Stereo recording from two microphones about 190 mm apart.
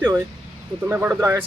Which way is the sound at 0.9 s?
10° right (ahead or behind).